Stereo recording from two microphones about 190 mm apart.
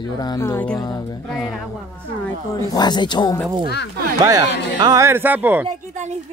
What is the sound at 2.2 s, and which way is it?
Speech, 20° left (ahead or behind).